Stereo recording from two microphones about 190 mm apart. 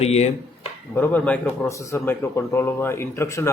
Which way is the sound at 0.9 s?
10° left (ahead or behind).